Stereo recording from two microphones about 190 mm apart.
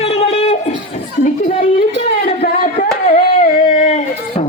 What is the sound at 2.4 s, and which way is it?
Singing, 45° left (ahead or behind).